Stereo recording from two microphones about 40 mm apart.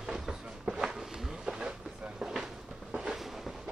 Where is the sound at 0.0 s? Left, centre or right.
Centre.